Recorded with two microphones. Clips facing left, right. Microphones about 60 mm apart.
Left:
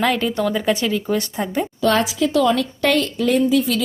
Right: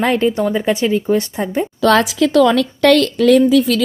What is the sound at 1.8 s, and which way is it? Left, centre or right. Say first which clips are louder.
Speech: right 5 dB; right.